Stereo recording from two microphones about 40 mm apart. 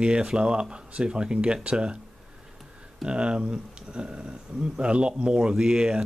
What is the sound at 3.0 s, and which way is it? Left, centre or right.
Speech, right.